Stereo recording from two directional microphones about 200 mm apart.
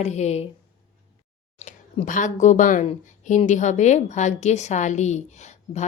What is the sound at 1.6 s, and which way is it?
Speech, 40° left (ahead or behind).